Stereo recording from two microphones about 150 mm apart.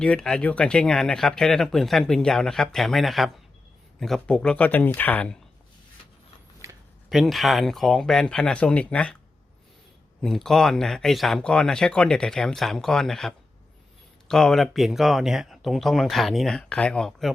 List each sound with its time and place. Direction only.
0.0 s speech: 5° left (ahead or behind)
6.6 s a sound: 20° right (ahead or behind)
7.1 s speech: centre (ahead or behind)
10.2 s speech: centre (ahead or behind)